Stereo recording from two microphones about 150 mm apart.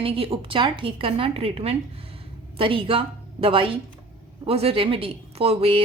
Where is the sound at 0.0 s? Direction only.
40° right (ahead or behind).